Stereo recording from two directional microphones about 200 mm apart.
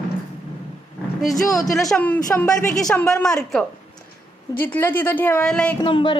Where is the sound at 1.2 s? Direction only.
Centre (ahead or behind).